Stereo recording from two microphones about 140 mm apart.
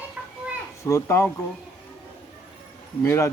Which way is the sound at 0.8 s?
20° left (ahead or behind).